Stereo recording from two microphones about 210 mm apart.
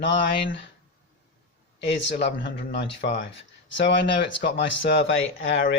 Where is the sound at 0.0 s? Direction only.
60° left (ahead or behind).